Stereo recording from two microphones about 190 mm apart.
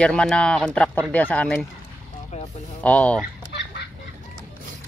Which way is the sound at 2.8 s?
5° left (ahead or behind).